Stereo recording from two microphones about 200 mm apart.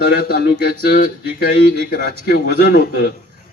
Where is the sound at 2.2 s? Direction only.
55° left (ahead or behind).